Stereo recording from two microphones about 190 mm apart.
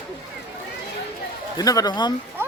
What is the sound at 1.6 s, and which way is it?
Speech, 20° left (ahead or behind).